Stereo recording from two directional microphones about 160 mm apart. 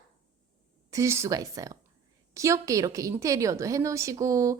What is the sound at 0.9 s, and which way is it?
A woman's voice, 20° right (ahead or behind).